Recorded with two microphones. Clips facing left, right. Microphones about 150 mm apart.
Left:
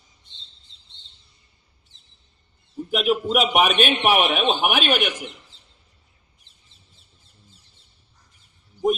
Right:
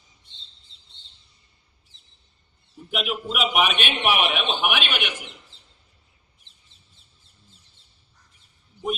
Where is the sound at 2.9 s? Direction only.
40° left (ahead or behind).